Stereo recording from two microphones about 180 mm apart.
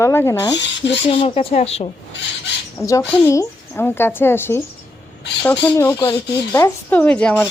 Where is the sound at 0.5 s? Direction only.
80° left.